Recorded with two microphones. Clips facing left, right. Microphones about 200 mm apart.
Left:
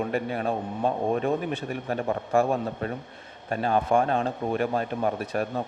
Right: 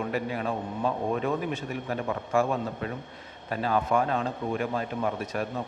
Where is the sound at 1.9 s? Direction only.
35° left (ahead or behind).